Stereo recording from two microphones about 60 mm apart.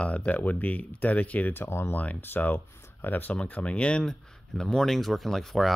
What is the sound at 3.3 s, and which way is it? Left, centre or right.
Speech, left.